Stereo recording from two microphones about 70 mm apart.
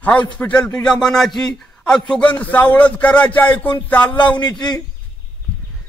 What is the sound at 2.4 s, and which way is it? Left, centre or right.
A man's voice, left.